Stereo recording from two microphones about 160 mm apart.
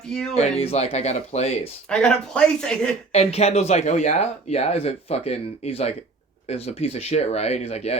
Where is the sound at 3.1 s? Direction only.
40° left (ahead or behind).